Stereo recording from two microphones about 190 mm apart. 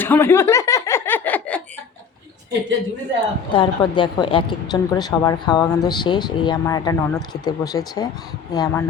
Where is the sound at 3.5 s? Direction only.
25° left (ahead or behind).